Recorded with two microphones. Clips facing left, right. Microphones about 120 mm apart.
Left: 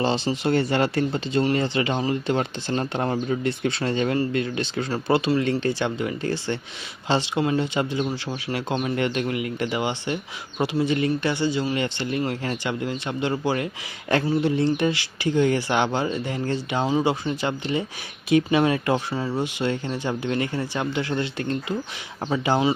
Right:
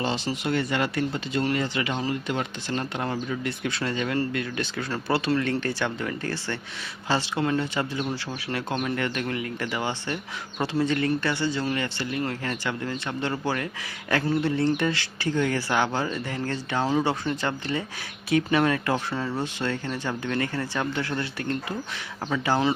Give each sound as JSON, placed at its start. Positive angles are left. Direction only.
{"t": 0.4, "sound": "speech", "side_deg": 35}